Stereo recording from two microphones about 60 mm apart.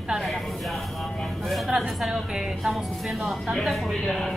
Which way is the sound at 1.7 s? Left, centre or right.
Centre.